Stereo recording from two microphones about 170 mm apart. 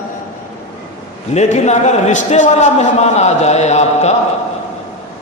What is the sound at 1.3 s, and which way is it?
A man's voice, 40° left (ahead or behind).